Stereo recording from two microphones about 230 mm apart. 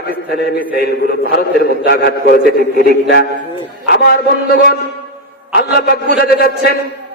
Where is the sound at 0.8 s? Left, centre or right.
Left.